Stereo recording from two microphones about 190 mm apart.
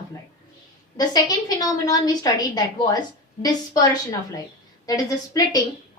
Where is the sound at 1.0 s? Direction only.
20° left (ahead or behind).